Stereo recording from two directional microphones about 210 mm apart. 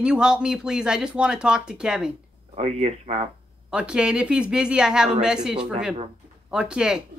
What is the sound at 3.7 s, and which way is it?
Speech, 5° right (ahead or behind).